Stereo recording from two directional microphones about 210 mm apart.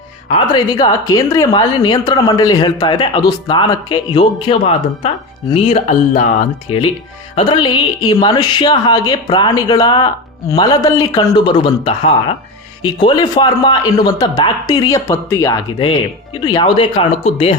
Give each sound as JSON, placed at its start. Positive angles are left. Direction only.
{"t": 0.3, "sound": "a woman's voice", "side_deg": 25}